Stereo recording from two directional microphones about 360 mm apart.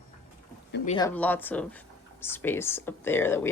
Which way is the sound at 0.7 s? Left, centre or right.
Centre.